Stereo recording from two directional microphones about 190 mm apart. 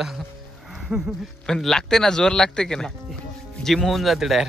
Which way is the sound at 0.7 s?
5° right (ahead or behind).